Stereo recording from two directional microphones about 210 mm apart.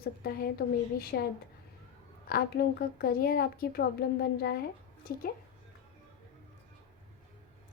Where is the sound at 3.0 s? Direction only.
45° left (ahead or behind).